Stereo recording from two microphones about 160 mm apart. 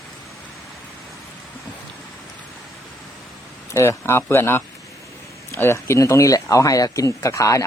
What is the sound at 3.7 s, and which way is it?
Speech, 15° left (ahead or behind).